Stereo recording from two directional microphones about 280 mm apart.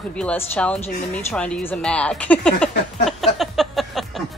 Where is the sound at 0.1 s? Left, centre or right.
Centre.